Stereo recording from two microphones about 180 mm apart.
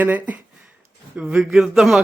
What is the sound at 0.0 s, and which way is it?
A man's voice, 10° right (ahead or behind).